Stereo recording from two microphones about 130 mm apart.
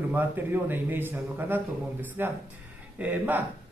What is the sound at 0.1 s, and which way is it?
A man's voice, 15° right (ahead or behind).